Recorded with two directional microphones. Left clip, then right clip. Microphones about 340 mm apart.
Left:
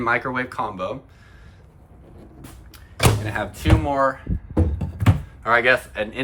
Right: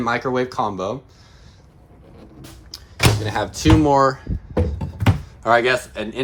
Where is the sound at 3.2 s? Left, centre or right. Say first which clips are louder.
Right 5 dB; centre.